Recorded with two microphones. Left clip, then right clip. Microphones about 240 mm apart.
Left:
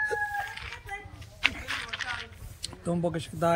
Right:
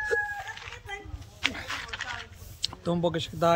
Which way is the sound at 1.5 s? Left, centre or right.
Centre.